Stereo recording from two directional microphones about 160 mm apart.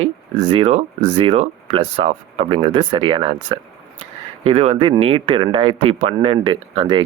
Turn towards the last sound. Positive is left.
turn(degrees=-30)  # may be behind; listen again after turning